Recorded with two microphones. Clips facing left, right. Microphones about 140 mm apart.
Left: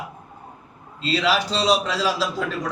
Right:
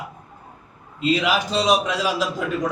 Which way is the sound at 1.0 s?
15° right (ahead or behind).